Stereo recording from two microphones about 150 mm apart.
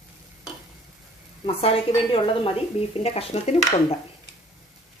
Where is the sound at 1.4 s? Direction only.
40° left (ahead or behind).